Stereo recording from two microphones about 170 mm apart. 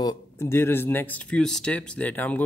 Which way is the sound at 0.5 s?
15° left (ahead or behind).